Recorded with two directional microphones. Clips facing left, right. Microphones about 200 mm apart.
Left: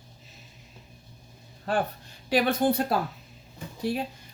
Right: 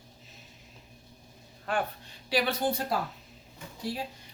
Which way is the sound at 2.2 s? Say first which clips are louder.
Left 5 dB; 50° left (ahead or behind).